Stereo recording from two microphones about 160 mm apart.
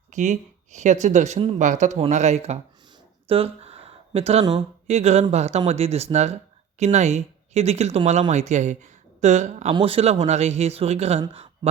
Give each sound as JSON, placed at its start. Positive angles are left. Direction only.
{"t": 0.1, "sound": "speech", "side_deg": -50}
{"t": 3.2, "sound": "a sound", "side_deg": -35}
{"t": 4.5, "sound": "speech", "side_deg": -45}